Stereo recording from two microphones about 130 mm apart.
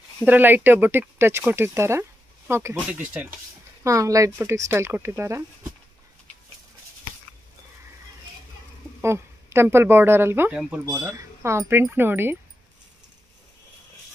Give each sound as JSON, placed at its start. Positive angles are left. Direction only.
{"t": 0.2, "sound": "speech", "side_deg": -15}
{"t": 3.8, "sound": "speech", "side_deg": -25}
{"t": 9.0, "sound": "a woman's voice", "side_deg": -20}